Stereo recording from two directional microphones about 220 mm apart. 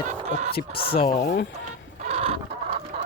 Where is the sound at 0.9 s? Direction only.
25° left (ahead or behind).